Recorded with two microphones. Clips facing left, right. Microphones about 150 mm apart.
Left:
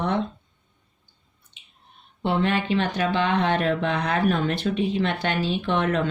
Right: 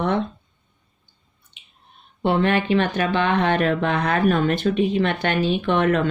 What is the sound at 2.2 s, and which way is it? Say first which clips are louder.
Speech: right 4 dB; 60° right (ahead or behind).